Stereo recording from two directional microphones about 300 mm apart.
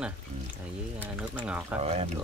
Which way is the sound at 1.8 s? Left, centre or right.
Right.